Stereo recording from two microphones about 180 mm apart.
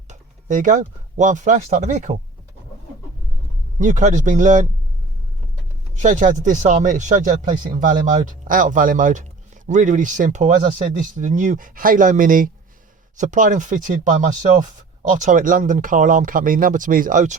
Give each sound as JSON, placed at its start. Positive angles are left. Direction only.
{"t": 0.1, "sound": "speech", "side_deg": -45}
{"t": 3.8, "sound": "speech", "side_deg": -45}
{"t": 6.0, "sound": "speech", "side_deg": -45}